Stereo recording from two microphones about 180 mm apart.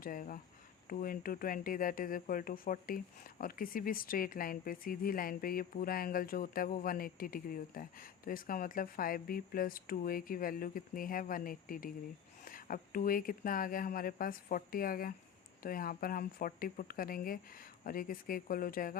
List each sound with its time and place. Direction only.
0.0 s speech: 50° left (ahead or behind)